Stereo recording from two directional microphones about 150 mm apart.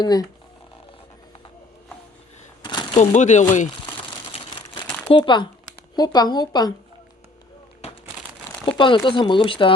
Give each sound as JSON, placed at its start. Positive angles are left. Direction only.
{"t": 0.0, "sound": "speech", "side_deg": 25}
{"t": 2.6, "sound": "shuffling cards", "side_deg": 30}
{"t": 3.0, "sound": "speech", "side_deg": 55}
{"t": 5.0, "sound": "speech", "side_deg": 35}
{"t": 8.8, "sound": "speech", "side_deg": 35}